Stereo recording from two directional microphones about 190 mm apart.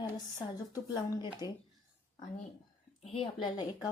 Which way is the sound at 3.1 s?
25° left (ahead or behind).